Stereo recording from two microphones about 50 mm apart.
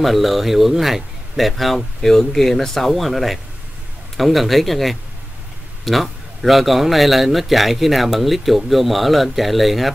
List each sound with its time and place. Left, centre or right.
0.0 s a man's voice: centre